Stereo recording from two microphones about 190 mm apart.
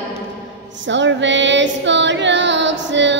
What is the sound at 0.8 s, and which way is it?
Female singing, 70° right (ahead or behind).